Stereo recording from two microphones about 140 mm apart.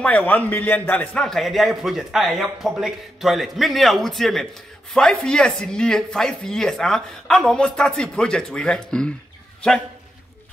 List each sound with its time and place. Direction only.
0.0 s a man's voice: 10° left (ahead or behind)